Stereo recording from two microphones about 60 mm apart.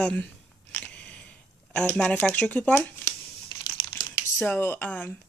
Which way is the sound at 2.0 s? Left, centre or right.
Centre.